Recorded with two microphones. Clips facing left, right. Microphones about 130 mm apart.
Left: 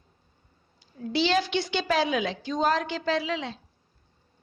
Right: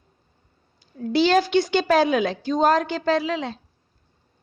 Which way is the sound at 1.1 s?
45° right (ahead or behind).